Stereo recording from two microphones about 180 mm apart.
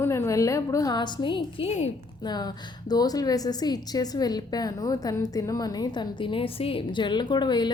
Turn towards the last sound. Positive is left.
turn(degrees=25)  # may be behind; listen again after turning